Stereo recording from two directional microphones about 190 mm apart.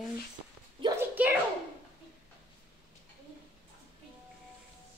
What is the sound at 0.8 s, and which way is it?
Speech, 20° right (ahead or behind).